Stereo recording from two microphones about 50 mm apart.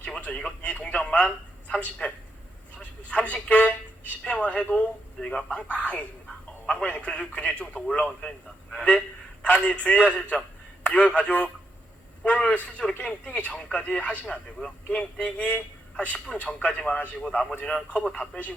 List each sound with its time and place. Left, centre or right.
0.0 s a man's voice: left